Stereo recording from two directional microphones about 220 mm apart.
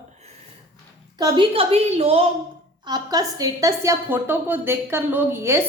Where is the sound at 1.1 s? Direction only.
20° right (ahead or behind).